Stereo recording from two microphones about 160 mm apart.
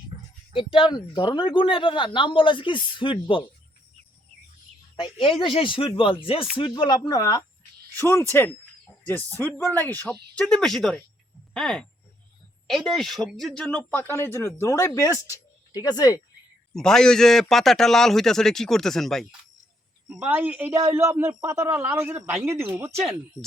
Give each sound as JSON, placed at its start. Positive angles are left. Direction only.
{"t": 0.1, "sound": "a sound", "side_deg": -25}
{"t": 0.5, "sound": "speech", "side_deg": 35}
{"t": 4.9, "sound": "a man's voice", "side_deg": 30}
{"t": 16.7, "sound": "a man's voice", "side_deg": 5}